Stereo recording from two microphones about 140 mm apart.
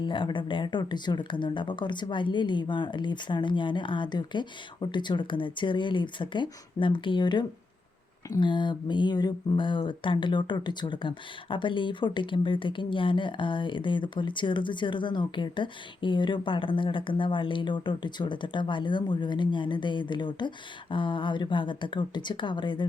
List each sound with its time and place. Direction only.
0.0 s speech: 35° left (ahead or behind)